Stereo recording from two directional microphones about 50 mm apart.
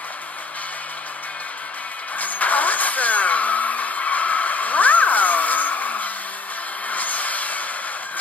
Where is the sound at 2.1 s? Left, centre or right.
Left.